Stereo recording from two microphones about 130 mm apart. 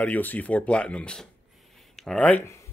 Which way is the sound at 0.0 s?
15° left (ahead or behind).